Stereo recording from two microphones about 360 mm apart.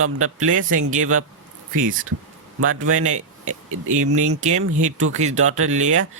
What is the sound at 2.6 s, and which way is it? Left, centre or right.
Speech, right.